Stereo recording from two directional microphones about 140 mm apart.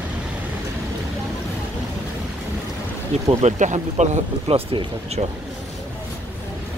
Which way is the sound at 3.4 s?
60° right (ahead or behind).